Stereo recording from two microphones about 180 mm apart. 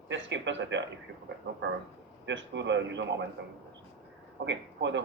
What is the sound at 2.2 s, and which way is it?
Speech, 85° right.